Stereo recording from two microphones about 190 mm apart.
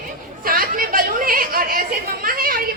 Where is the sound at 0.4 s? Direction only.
50° right (ahead or behind).